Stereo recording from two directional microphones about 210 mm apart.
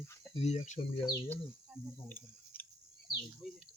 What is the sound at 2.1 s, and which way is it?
Tick-tock, 10° left (ahead or behind).